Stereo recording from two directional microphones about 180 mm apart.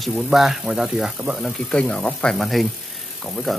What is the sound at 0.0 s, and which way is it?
Speech, centre (ahead or behind).